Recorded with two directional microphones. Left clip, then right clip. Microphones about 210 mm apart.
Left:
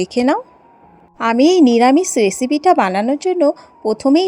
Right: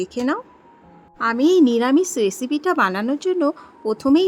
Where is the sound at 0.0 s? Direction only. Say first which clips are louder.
Left 7 dB; 25° left (ahead or behind).